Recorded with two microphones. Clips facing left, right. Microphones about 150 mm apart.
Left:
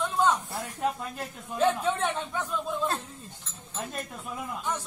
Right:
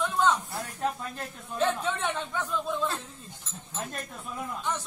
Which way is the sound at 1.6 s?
10° left (ahead or behind).